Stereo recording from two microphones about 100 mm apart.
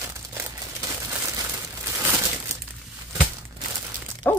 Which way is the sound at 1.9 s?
25° right (ahead or behind).